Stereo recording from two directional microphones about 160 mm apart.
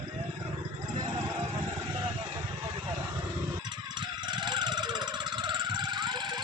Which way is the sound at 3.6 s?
30° right (ahead or behind).